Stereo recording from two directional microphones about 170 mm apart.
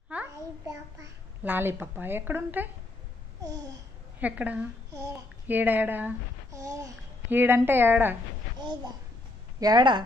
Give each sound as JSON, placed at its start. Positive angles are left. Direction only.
{"t": 0.1, "sound": "a sound", "side_deg": -15}
{"t": 4.2, "sound": "a child's voice", "side_deg": -10}
{"t": 9.6, "sound": "speech", "side_deg": -25}